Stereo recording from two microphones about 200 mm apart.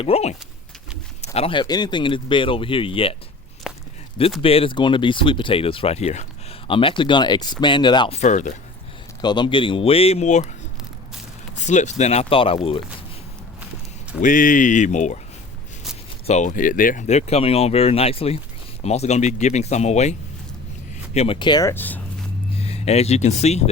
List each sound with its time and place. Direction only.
0.0 s speech: 30° left (ahead or behind)
3.6 s walk: centre (ahead or behind)
4.4 s speech: 30° left (ahead or behind)
9.2 s speech: 20° left (ahead or behind)
11.5 s speech: 35° left (ahead or behind)
14.2 s speech: 40° left (ahead or behind)
16.2 s speech: 35° left (ahead or behind); by 22.0 s 10° left (ahead or behind)
22.5 s speech: 30° left (ahead or behind)